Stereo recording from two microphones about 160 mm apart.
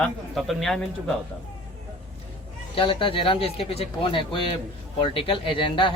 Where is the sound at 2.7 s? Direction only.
35° left (ahead or behind).